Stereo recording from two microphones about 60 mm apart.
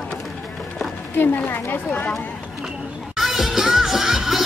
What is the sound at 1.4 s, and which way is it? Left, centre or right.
Speech, left.